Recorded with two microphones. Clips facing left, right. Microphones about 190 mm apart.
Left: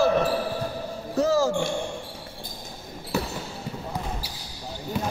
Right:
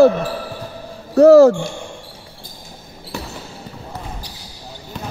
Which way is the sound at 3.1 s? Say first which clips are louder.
Left 3 dB; 5° left (ahead or behind).